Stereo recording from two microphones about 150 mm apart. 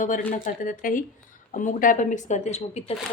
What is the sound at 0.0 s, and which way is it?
A woman's voice, 60° left (ahead or behind).